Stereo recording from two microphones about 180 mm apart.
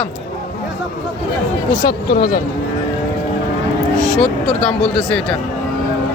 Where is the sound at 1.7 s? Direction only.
20° left (ahead or behind).